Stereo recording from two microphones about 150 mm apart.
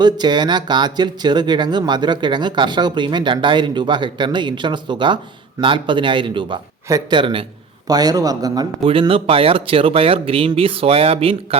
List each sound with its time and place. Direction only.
0.0 s speech: 30° right (ahead or behind)
8.8 s speech: 40° right (ahead or behind)